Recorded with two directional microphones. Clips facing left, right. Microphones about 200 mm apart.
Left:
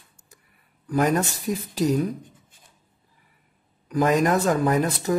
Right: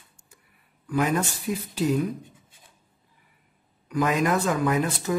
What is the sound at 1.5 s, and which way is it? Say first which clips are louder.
Speech: left 2 dB; 40° left (ahead or behind).